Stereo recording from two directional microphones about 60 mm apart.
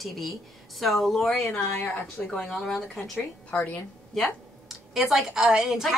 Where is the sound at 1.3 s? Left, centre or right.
Left.